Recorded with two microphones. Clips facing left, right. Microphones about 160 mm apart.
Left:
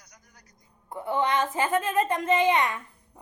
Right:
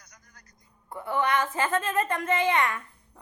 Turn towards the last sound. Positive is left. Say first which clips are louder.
# even
turn(degrees=20)  # may be behind; listen again after turning